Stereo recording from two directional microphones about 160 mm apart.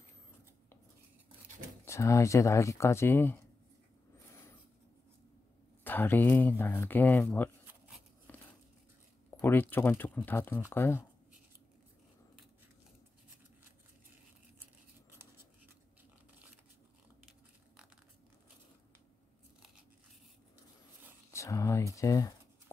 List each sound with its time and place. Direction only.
1.9 s speech: 20° left (ahead or behind)
5.9 s speech: 10° left (ahead or behind)
8.3 s a sound: 10° left (ahead or behind)
9.3 s speech: 15° left (ahead or behind)
21.3 s a sound: 20° left (ahead or behind)
21.9 s speech: 20° left (ahead or behind)